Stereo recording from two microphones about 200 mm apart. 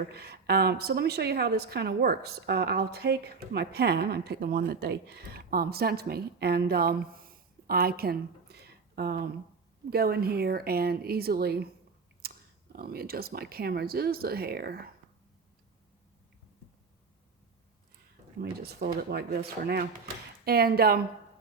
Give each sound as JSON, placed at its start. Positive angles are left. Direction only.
{"t": 0.1, "sound": "a woman's voice", "side_deg": -55}
{"t": 18.3, "sound": "a woman's voice", "side_deg": -50}